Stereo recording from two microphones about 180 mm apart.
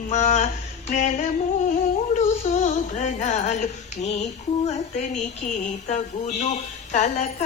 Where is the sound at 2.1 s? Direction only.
40° left (ahead or behind).